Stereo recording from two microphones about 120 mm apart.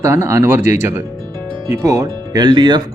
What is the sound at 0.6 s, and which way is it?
Speech, 90° left.